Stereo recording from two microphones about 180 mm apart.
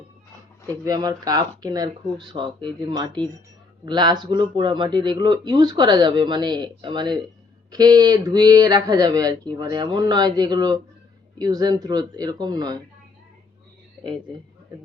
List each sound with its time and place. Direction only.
0.7 s speech: 20° right (ahead or behind)